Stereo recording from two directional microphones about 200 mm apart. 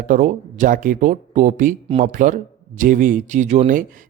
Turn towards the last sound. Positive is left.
turn(degrees=-40)  # may be behind; listen again after turning